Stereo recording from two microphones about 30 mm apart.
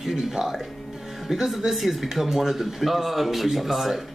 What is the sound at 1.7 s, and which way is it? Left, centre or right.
Speech, centre.